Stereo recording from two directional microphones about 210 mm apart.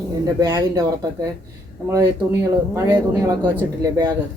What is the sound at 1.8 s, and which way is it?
Speech, 15° right (ahead or behind).